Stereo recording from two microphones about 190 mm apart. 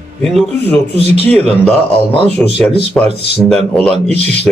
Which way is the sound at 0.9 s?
35° right (ahead or behind).